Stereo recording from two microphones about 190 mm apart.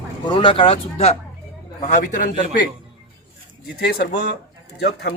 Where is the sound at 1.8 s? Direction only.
40° left (ahead or behind).